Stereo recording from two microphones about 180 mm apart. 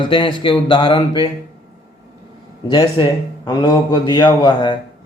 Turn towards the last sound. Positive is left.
turn(degrees=25)  # may be behind; listen again after turning